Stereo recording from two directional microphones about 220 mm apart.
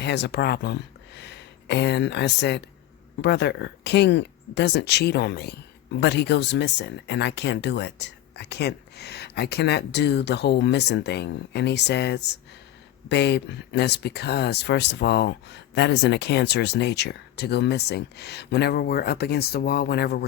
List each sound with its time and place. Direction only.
0.0 s speech: 50° left (ahead or behind)